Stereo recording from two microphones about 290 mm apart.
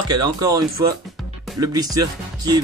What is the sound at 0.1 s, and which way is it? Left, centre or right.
Speech, centre.